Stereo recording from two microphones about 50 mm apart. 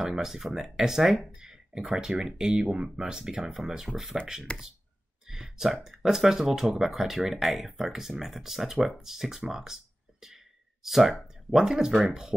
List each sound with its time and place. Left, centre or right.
0.0 s speech: centre
4.5 s speech: left
5.2 s a sound: centre
5.9 s speech: centre
10.2 s a sound: centre
11.5 s speech: centre